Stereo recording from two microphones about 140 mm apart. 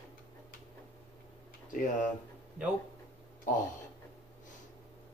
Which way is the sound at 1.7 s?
70° left (ahead or behind).